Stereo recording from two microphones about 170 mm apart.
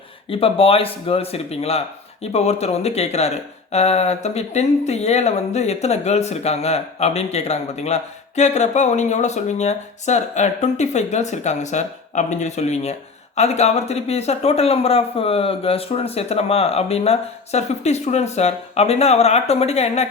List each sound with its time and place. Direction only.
0.3 s speech: 35° left (ahead or behind)